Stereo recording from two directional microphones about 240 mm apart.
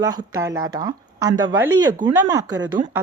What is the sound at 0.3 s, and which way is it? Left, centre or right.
Speech, centre.